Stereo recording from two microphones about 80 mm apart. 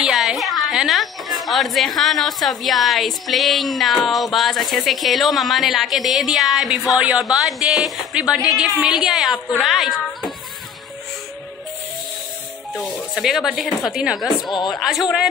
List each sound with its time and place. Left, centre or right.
0.0 s a woman's voice: centre
12.8 s a woman's voice: centre